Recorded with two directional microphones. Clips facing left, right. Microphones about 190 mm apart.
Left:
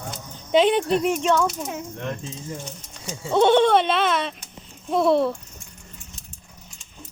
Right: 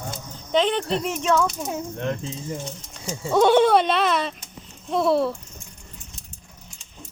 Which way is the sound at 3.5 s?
5° right (ahead or behind).